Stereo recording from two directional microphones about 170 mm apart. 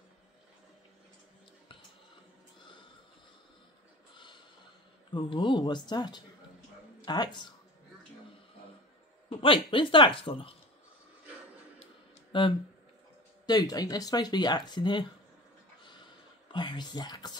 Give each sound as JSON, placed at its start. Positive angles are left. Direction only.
{"t": 5.1, "sound": "speech", "side_deg": 30}
{"t": 9.3, "sound": "speech", "side_deg": 30}
{"t": 12.3, "sound": "speech", "side_deg": 30}
{"t": 16.4, "sound": "speech", "side_deg": 25}